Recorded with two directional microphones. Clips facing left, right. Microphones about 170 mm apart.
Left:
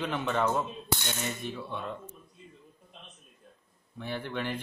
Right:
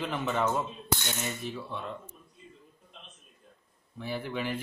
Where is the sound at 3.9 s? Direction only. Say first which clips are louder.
Right 1 dB; 5° right (ahead or behind).